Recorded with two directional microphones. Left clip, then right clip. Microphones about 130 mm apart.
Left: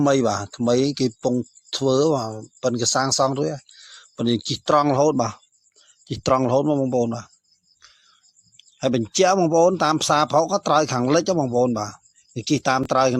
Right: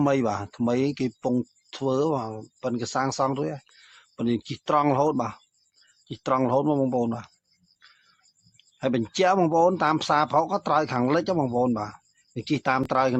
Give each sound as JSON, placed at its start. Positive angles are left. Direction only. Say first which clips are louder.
{"t": 0.0, "sound": "speech", "louder": "left 5 dB", "side_deg": 35}
{"t": 5.1, "sound": "speech", "louder": "left 5 dB", "side_deg": 60}
{"t": 6.4, "sound": "speech", "louder": "left 3 dB", "side_deg": 35}
{"t": 8.5, "sound": "speech", "louder": "left 4 dB", "side_deg": 40}